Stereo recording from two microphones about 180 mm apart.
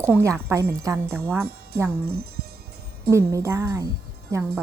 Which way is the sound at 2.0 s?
60° right (ahead or behind).